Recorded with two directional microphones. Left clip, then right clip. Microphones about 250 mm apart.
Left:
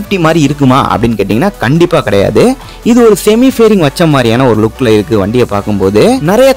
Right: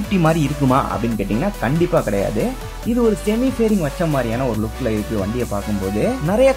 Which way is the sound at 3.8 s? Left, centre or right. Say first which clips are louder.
Left 12 dB; left.